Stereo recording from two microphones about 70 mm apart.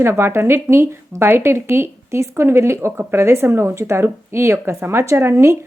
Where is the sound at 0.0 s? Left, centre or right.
Right.